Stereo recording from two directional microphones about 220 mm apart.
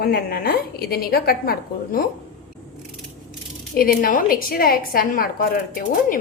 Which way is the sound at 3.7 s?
40° left (ahead or behind).